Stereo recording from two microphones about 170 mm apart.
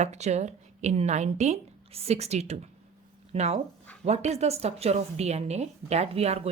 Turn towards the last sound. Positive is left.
turn(degrees=-40)  # may be behind; listen again after turning